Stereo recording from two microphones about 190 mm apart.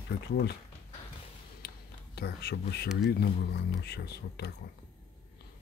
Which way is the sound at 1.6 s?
60° left (ahead or behind).